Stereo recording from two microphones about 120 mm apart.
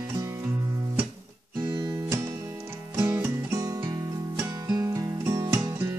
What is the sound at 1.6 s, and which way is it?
Guitar, 30° right (ahead or behind).